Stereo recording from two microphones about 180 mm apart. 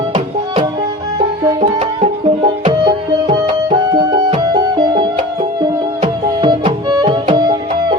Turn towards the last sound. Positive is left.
turn(degrees=-25)  # may be behind; listen again after turning